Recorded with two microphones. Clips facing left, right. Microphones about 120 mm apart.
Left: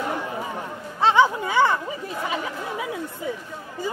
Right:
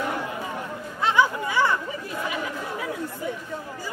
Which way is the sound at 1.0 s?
25° left (ahead or behind).